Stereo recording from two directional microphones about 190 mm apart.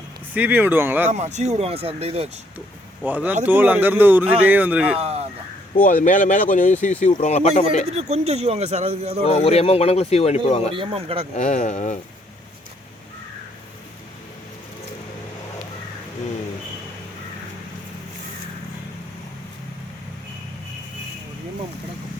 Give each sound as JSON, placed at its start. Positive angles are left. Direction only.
{"t": 0.3, "sound": "speech", "side_deg": -10}
{"t": 1.1, "sound": "speech", "side_deg": -35}
{"t": 3.0, "sound": "speech", "side_deg": -5}
{"t": 4.9, "sound": "speech", "side_deg": -35}
{"t": 5.7, "sound": "speech", "side_deg": 45}
{"t": 7.9, "sound": "speech", "side_deg": -35}
{"t": 9.2, "sound": "speech", "side_deg": 30}
{"t": 10.8, "sound": "speech", "side_deg": -30}
{"t": 11.3, "sound": "speech", "side_deg": 40}